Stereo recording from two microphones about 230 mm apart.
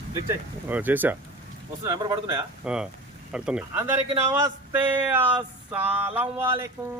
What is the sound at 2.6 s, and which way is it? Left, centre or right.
Speech, centre.